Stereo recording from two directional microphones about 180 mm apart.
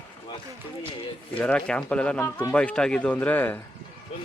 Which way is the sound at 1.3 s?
5° left (ahead or behind).